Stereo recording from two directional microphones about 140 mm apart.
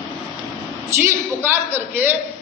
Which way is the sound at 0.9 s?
20° right (ahead or behind).